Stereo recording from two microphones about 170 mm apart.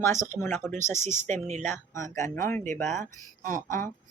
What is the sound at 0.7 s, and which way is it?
Speech, 45° right (ahead or behind).